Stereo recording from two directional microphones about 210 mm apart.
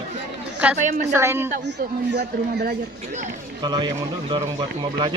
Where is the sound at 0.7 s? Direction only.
35° right (ahead or behind).